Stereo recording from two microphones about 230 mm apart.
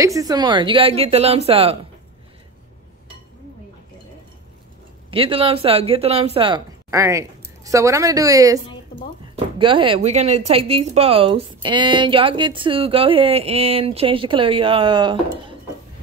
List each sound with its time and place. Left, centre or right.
0.0 s speech: centre
5.1 s speech: right